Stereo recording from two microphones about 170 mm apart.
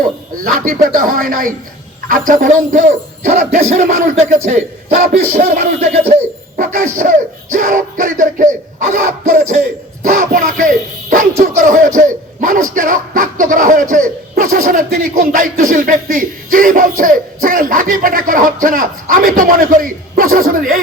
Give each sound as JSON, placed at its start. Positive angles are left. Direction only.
{"t": 0.0, "sound": "a man's voice", "side_deg": -55}